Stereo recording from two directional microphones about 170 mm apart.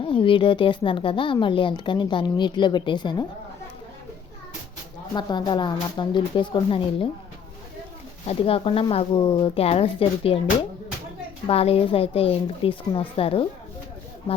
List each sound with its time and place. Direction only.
0.0 s speech: 30° left (ahead or behind)
5.1 s speech: 25° left (ahead or behind)
8.3 s speech: 35° left (ahead or behind)